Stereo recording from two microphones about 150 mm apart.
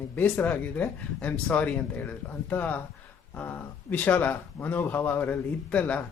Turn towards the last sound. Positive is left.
turn(degrees=10)  # may be behind; listen again after turning